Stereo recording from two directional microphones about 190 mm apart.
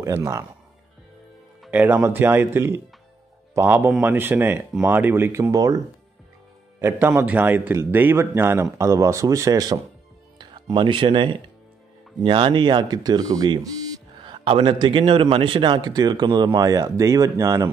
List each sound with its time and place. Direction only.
0.0 s speech: 15° right (ahead or behind)
1.6 s speech: 10° right (ahead or behind)
6.8 s a man's voice: 10° right (ahead or behind)